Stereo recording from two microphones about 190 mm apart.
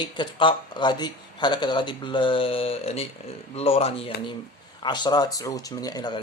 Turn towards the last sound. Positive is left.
turn(degrees=20)  # may be behind; listen again after turning